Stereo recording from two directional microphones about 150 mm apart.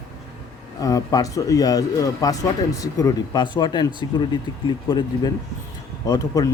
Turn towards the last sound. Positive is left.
turn(degrees=25)  # may be behind; listen again after turning